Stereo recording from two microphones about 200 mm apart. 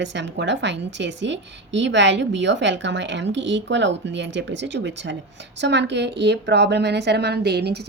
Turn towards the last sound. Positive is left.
turn(degrees=-55)  # may be behind; listen again after turning